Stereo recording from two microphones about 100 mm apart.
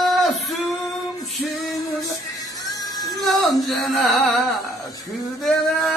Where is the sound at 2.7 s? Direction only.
40° left (ahead or behind).